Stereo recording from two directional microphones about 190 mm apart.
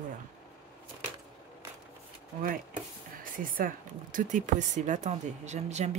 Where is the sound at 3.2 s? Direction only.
45° right (ahead or behind).